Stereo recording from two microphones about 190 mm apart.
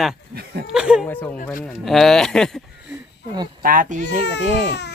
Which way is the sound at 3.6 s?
45° right (ahead or behind).